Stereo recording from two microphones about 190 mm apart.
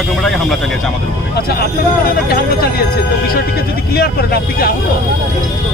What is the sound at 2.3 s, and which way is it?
Speech, 55° left (ahead or behind).